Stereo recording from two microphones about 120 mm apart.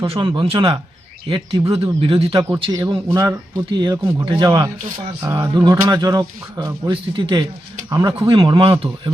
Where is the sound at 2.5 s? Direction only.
25° right (ahead or behind).